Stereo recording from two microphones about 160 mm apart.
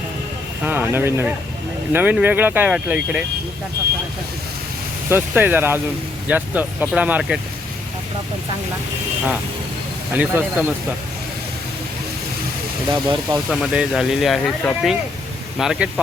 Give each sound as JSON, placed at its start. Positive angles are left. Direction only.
{"t": 0.6, "sound": "speech", "side_deg": -10}
{"t": 5.0, "sound": "speech", "side_deg": -15}
{"t": 10.2, "sound": "speech", "side_deg": -10}
{"t": 12.9, "sound": "speech", "side_deg": -20}
{"t": 13.5, "sound": "speech", "side_deg": 0}